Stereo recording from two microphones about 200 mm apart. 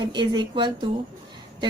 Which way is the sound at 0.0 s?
20° right (ahead or behind).